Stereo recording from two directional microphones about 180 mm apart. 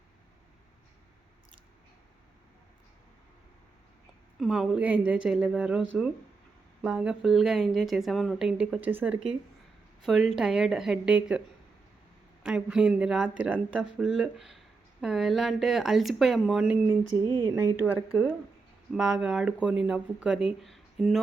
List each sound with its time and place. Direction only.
4.4 s a woman's voice: centre (ahead or behind)
17.2 s speech: 25° right (ahead or behind)
17.5 s a woman's voice: 15° right (ahead or behind)